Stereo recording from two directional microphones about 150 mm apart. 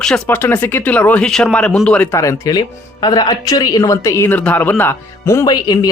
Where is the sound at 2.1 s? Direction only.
20° left (ahead or behind).